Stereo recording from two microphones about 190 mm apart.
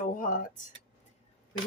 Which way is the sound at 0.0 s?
45° left (ahead or behind).